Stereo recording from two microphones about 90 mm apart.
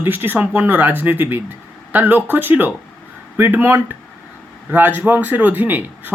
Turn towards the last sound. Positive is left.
turn(degrees=-20)  # may be behind; listen again after turning